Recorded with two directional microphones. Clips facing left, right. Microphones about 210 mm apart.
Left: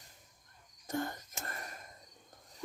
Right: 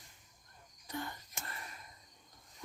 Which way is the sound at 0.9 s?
45° left (ahead or behind).